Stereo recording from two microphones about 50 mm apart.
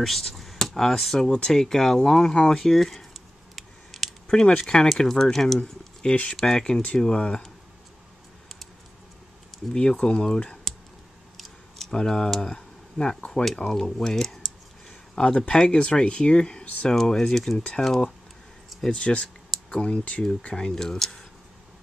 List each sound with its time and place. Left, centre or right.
0.0 s speech: centre
4.3 s speech: centre
5.6 s speech: left
6.4 s speech: centre
9.9 s speech: centre
11.9 s speech: centre
13.6 s computer keyboard: centre
15.1 s speech: centre
16.9 s speech: centre
18.9 s speech: left; by 21.3 s centre